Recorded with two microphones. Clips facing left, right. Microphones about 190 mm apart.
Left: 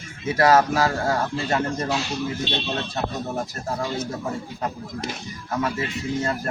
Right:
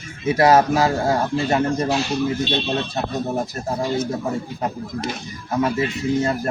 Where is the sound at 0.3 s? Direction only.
20° right (ahead or behind).